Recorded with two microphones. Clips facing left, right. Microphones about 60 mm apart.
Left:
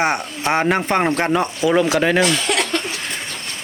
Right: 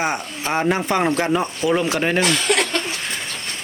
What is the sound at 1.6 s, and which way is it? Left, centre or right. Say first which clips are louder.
Speech: left 3 dB; centre.